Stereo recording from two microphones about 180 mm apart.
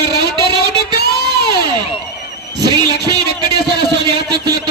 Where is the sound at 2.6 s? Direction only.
20° right (ahead or behind).